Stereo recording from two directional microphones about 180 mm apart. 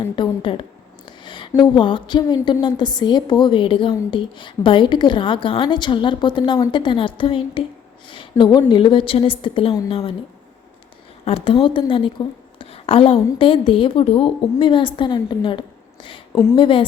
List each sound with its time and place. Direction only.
0.2 s a woman's voice: 30° left (ahead or behind)
11.3 s a woman's voice: 30° left (ahead or behind)
16.3 s a woman's voice: 15° left (ahead or behind)
16.6 s a woman's voice: 30° left (ahead or behind)